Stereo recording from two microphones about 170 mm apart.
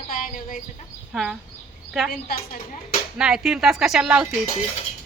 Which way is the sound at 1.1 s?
5° right (ahead or behind).